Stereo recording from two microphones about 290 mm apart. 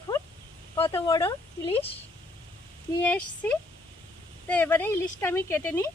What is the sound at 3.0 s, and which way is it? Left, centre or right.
Speech, centre.